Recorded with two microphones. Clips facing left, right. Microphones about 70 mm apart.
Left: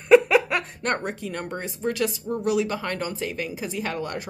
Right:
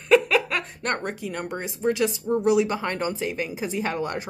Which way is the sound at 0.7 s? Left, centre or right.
Centre.